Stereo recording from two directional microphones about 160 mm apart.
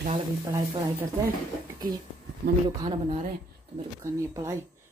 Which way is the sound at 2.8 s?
35° right (ahead or behind).